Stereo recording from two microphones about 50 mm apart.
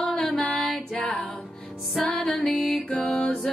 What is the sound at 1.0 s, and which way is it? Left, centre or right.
Music, left.